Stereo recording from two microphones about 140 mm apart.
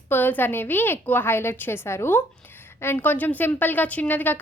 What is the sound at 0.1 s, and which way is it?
A woman's voice, 15° left (ahead or behind).